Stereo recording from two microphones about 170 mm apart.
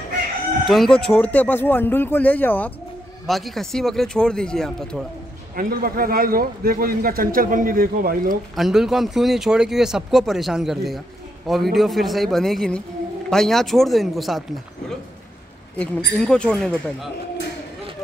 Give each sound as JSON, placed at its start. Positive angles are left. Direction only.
{"t": 0.7, "sound": "speech", "side_deg": 0}
{"t": 5.6, "sound": "a man's voice", "side_deg": -60}
{"t": 8.5, "sound": "speech", "side_deg": 0}
{"t": 15.8, "sound": "speech", "side_deg": 5}